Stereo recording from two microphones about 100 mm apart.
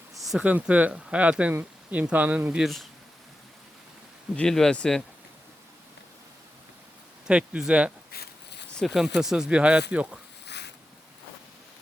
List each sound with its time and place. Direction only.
0.3 s speech: 10° right (ahead or behind)
4.4 s speech: 5° left (ahead or behind)
7.3 s speech: 10° right (ahead or behind)